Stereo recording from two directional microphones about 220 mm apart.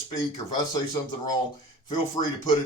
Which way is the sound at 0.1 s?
15° left (ahead or behind).